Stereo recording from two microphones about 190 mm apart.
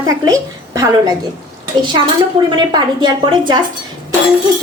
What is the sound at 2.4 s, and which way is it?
A woman's voice, 25° right (ahead or behind).